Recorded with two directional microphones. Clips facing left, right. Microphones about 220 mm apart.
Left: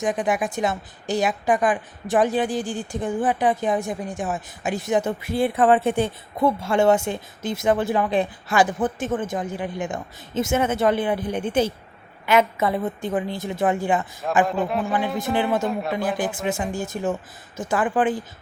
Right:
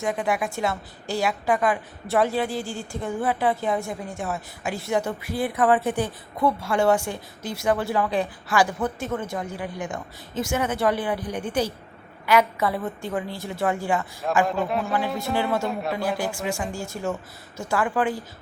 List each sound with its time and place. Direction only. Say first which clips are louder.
0.0 s a woman's voice: left 2 dB; 20° left (ahead or behind)
14.4 s a man's voice: left 1 dB; centre (ahead or behind)
16.0 s a woman's voice: left 2 dB; 20° left (ahead or behind)